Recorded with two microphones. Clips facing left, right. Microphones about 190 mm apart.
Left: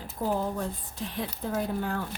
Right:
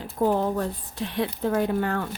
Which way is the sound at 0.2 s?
70° right (ahead or behind).